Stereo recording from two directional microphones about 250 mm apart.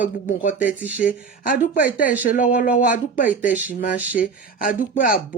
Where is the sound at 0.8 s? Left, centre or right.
Centre.